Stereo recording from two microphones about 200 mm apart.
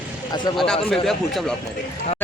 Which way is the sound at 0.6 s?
Centre (ahead or behind).